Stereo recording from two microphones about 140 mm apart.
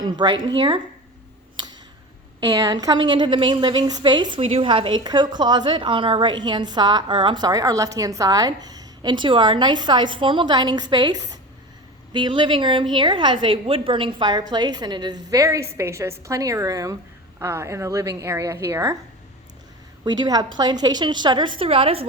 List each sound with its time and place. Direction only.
0.0 s speech: 30° right (ahead or behind)
2.4 s a woman's voice: 30° right (ahead or behind)
20.1 s a woman's voice: 30° right (ahead or behind)